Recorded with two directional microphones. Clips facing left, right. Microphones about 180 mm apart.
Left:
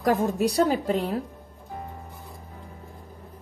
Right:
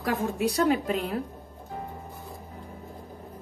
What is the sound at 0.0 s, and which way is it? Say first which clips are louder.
A woman's voice: left 4 dB; 40° left (ahead or behind).